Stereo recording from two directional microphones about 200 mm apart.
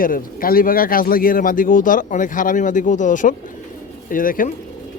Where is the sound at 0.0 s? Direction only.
45° left (ahead or behind).